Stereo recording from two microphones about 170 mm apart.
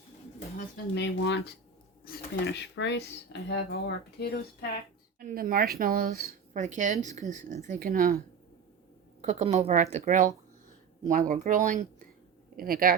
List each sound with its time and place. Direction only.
0.9 s speech: 90° left
2.0 s speech: 70° left (ahead or behind)
5.2 s a woman's voice: 55° right (ahead or behind)
9.2 s a woman's voice: 40° right (ahead or behind)
12.5 s speech: 60° right (ahead or behind)